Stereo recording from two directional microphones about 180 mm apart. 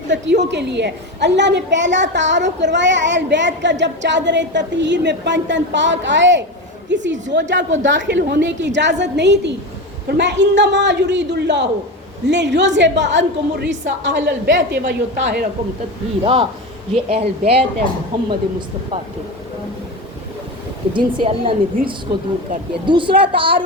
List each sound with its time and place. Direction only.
0.1 s a woman's voice: 80° right
16.2 s speech: 30° right (ahead or behind)
20.9 s speech: 30° right (ahead or behind)
22.9 s speech: 25° right (ahead or behind)